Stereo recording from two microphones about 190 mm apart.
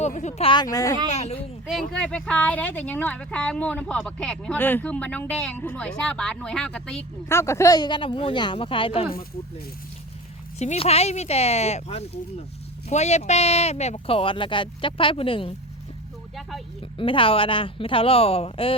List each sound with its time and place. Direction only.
0.0 s speech: 40° left (ahead or behind); by 0.9 s 20° left (ahead or behind)
1.0 s speech: 35° left (ahead or behind)
1.6 s speech: centre (ahead or behind); by 9.0 s 30° left (ahead or behind)
10.6 s speech: 35° left (ahead or behind)
17.0 s speech: 25° left (ahead or behind)